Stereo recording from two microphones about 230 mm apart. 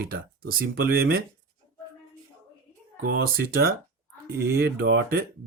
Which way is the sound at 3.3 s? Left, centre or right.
Right.